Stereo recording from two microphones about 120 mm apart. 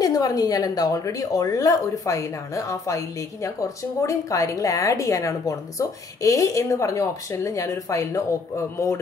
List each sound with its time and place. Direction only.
0.0 s a woman's voice: 30° left (ahead or behind)